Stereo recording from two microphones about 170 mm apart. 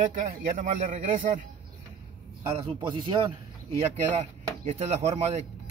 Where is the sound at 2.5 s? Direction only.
30° right (ahead or behind).